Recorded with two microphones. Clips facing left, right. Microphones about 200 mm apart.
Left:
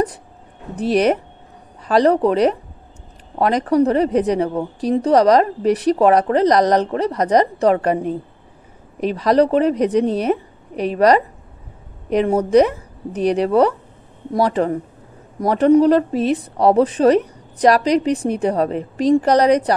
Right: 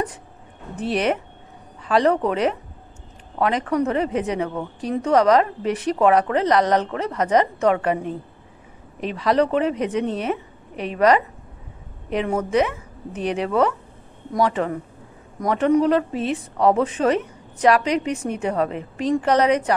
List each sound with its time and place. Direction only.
0.7 s a woman's voice: 40° left (ahead or behind)